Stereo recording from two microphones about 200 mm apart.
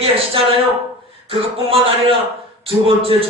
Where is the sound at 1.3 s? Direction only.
30° right (ahead or behind).